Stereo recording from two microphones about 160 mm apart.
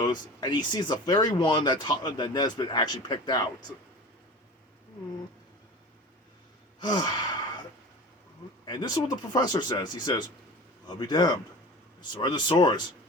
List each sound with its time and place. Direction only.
0.0 s speech: 25° left (ahead or behind)
6.7 s gasp: 25° left (ahead or behind)
8.6 s speech: 25° left (ahead or behind)